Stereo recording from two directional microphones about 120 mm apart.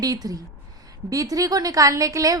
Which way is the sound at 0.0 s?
30° right (ahead or behind).